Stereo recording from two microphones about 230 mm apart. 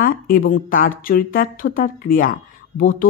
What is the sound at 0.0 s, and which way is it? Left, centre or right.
Speech, left.